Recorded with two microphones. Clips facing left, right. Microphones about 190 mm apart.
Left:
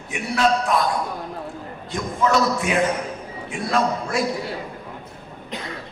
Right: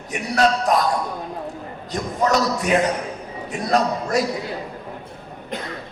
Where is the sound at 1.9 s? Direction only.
40° right (ahead or behind).